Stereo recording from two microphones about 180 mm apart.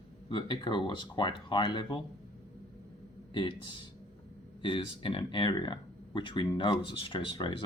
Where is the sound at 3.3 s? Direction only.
30° left (ahead or behind).